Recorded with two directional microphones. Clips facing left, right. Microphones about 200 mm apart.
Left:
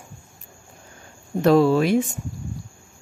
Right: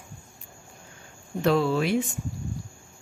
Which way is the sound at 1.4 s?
40° left (ahead or behind).